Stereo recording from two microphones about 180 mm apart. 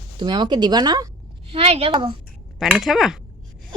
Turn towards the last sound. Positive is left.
turn(degrees=0)  # may be behind; listen again after turning